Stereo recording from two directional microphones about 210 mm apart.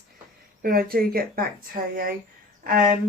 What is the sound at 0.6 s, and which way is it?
Speech, 45° right (ahead or behind).